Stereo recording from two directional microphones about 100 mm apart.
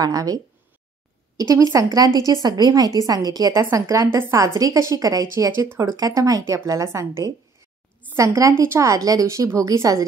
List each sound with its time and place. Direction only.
0.0 s speech: 35° right (ahead or behind)
1.5 s speech: 35° right (ahead or behind)